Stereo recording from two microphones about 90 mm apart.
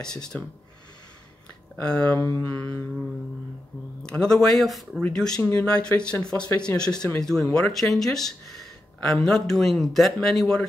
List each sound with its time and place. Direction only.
0.0 s speech: 10° left (ahead or behind)
1.8 s speech: 10° left (ahead or behind)
2.1 s mantra: 30° left (ahead or behind)
4.1 s speech: 10° left (ahead or behind)